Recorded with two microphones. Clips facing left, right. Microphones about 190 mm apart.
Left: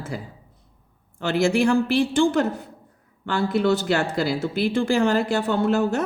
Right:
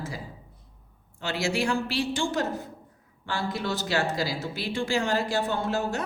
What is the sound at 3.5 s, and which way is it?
A woman's voice, 60° left (ahead or behind).